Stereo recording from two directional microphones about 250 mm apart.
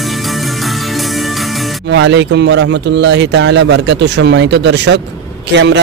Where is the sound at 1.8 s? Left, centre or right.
Right.